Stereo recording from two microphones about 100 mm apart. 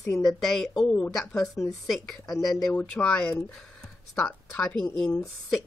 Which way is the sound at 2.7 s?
15° left (ahead or behind).